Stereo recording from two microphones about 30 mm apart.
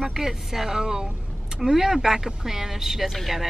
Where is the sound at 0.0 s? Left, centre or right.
Centre.